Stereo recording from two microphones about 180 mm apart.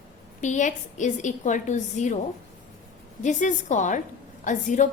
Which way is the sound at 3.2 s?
45° left (ahead or behind).